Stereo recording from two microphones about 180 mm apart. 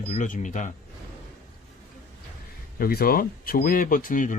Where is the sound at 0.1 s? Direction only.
45° left (ahead or behind).